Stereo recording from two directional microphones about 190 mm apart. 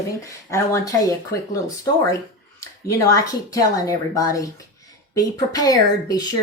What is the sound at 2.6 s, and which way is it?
Speech, 15° left (ahead or behind).